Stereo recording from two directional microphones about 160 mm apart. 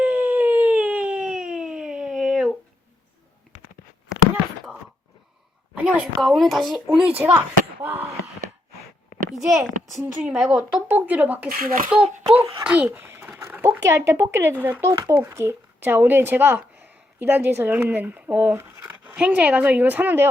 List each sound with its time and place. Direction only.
0.0 s a sound: 10° right (ahead or behind)
5.7 s a child's voice: 5° right (ahead or behind)
9.3 s a child's voice: centre (ahead or behind)
11.4 s a child's voice: 60° right (ahead or behind)
12.0 s a child's voice: 40° right (ahead or behind)
12.3 s a child's voice: 10° right (ahead or behind)
13.4 s a sound: 15° right (ahead or behind)
13.9 s speech: 15° right (ahead or behind)